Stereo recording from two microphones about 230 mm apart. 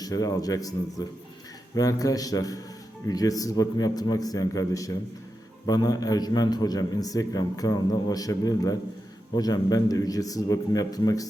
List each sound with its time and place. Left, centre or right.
0.0 s a man's voice: centre